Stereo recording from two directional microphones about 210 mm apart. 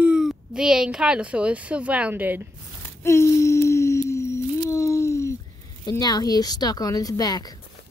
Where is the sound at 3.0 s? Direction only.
15° left (ahead or behind).